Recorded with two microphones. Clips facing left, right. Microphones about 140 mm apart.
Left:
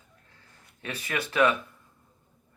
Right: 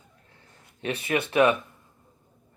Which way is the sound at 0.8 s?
25° right (ahead or behind).